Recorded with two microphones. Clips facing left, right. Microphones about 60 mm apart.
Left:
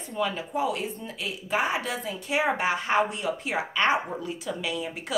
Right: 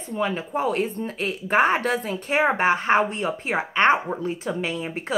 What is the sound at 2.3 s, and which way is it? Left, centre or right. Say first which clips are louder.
Speech: right 5 dB; right.